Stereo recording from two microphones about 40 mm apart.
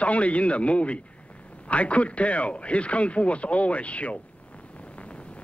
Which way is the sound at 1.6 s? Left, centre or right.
Left.